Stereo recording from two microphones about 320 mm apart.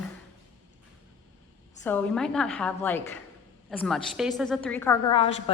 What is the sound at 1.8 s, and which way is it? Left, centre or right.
A woman's voice, centre.